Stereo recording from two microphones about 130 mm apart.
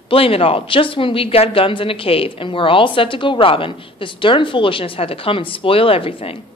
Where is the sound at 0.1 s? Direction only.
45° left (ahead or behind).